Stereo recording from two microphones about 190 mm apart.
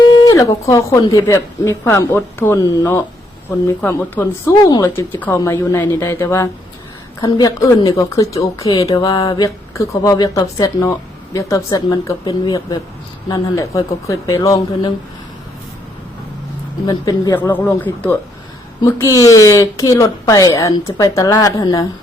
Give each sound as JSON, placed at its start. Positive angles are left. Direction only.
{"t": 0.3, "sound": "a sound", "side_deg": 15}
{"t": 0.7, "sound": "a woman's voice", "side_deg": 15}
{"t": 16.8, "sound": "a woman's voice", "side_deg": 20}